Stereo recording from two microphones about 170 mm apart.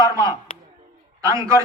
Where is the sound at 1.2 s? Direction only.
20° right (ahead or behind).